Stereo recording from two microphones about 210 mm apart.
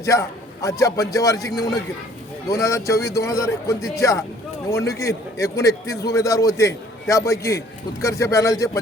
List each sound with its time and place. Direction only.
0.0 s a man's voice: 15° left (ahead or behind)